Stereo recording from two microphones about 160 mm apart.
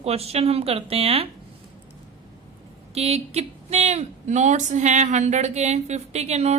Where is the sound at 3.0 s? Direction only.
40° right (ahead or behind).